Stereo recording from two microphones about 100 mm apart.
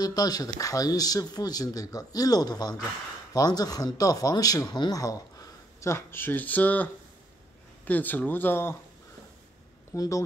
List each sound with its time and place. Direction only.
0.0 s speech: 40° left (ahead or behind)
5.0 s speech: 35° left (ahead or behind)
9.9 s speech: 30° left (ahead or behind)